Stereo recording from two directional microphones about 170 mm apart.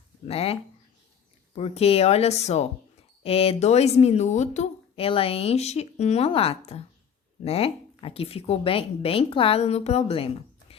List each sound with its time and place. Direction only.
0.3 s speech: 35° left (ahead or behind)